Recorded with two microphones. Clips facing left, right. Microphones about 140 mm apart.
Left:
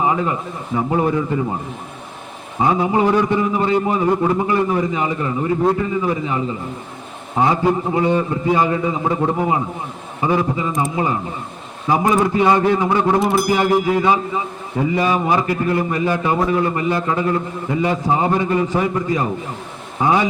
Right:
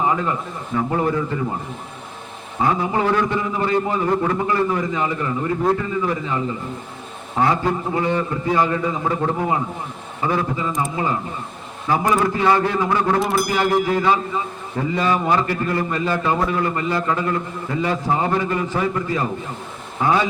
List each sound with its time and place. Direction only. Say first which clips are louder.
0.0 s a man's voice: left 2 dB; 15° left (ahead or behind)
2.6 s a man's voice: left 3 dB; 20° left (ahead or behind)
13.1 s music: left 3 dB; centre (ahead or behind)
14.0 s a man's voice: left 2 dB; 15° left (ahead or behind)